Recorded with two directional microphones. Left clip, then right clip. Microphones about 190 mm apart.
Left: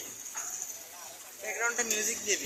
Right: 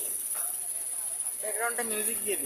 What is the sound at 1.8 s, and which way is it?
Speech, 70° right (ahead or behind).